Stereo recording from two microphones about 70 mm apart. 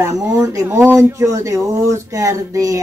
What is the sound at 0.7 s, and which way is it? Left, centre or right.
Speech, right.